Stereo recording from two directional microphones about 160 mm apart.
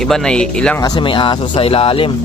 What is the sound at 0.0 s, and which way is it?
Speech, 5° left (ahead or behind).